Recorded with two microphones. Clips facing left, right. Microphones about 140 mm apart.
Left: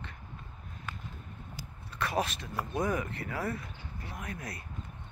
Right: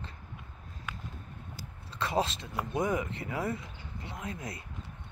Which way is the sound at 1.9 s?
25° right (ahead or behind).